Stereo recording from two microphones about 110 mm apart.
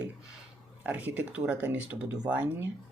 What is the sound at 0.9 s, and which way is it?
Speech, 15° right (ahead or behind).